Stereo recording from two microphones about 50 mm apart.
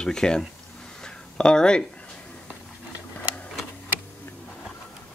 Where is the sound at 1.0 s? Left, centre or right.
Centre.